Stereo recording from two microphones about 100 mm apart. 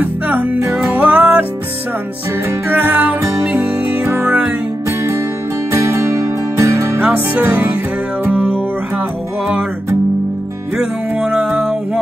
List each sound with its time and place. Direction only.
0.0 s music: 15° right (ahead or behind)
2.7 s music: 15° right (ahead or behind)
4.8 s music: 30° right (ahead or behind)
7.0 s music: 15° right (ahead or behind)
10.8 s music: 10° right (ahead or behind)